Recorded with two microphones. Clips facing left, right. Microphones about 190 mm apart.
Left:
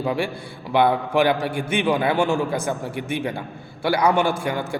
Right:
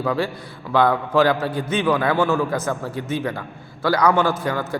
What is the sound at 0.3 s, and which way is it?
A man's voice, 30° left (ahead or behind).